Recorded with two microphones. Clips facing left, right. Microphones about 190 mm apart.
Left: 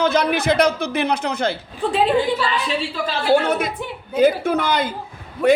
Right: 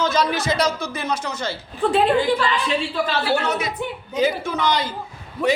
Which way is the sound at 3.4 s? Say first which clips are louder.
Left 2 dB; 55° left (ahead or behind).